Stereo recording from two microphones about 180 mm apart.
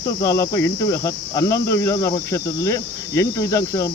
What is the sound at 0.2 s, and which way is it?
Cricket, 20° left (ahead or behind).